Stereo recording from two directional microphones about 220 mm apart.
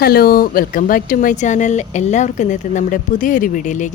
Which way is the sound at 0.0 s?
45° left (ahead or behind).